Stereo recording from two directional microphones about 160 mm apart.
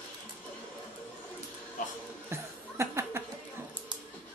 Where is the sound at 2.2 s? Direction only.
15° right (ahead or behind).